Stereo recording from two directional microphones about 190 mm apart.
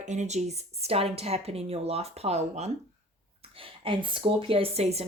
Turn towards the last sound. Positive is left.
turn(degrees=-35)  # may be behind; listen again after turning